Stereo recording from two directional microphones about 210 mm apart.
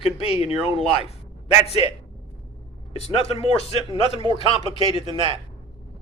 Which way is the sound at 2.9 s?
30° left (ahead or behind).